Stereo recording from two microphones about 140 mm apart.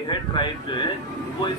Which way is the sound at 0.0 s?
35° left (ahead or behind).